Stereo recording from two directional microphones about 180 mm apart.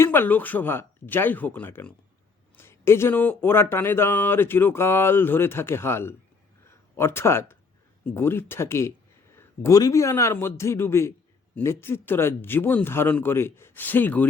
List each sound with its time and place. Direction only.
0.0 s speech: 10° left (ahead or behind)